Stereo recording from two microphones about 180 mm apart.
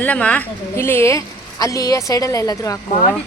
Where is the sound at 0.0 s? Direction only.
5° left (ahead or behind).